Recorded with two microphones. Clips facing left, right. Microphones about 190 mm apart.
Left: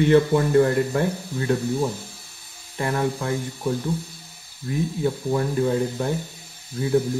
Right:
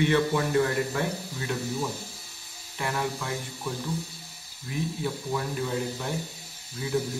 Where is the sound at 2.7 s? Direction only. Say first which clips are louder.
Left 6 dB; 50° left (ahead or behind).